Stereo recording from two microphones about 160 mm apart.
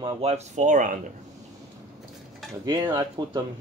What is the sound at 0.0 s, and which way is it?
Speech, 40° right (ahead or behind).